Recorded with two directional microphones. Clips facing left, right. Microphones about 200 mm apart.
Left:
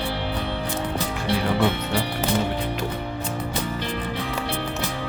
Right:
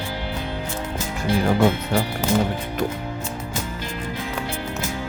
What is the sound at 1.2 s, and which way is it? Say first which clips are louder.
Speech: right 4 dB; 45° right (ahead or behind).